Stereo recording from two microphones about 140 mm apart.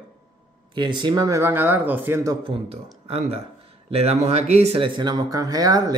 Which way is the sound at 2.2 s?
35° right (ahead or behind).